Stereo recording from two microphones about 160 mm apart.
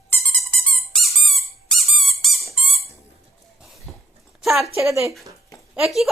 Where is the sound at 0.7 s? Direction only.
Centre (ahead or behind).